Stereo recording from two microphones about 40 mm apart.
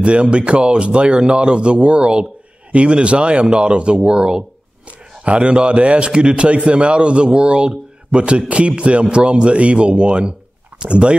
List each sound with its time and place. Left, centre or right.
0.0 s a man's voice: right